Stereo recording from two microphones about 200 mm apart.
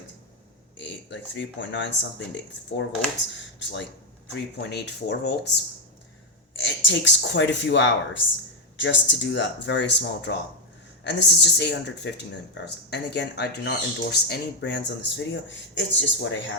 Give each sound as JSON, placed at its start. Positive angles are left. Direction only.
{"t": 0.8, "sound": "speech", "side_deg": 60}
{"t": 6.5, "sound": "speech", "side_deg": 65}